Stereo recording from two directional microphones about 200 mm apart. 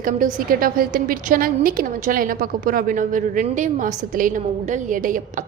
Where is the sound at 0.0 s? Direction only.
45° right (ahead or behind).